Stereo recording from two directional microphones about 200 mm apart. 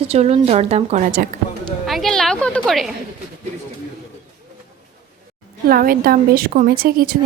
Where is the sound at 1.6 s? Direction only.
Centre (ahead or behind).